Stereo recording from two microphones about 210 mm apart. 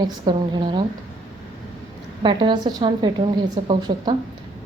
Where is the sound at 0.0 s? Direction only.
20° right (ahead or behind).